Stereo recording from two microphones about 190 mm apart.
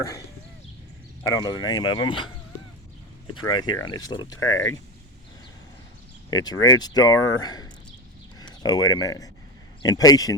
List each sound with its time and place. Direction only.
1.3 s speech: 20° left (ahead or behind)
3.3 s speech: 20° left (ahead or behind)
6.3 s speech: 20° left (ahead or behind)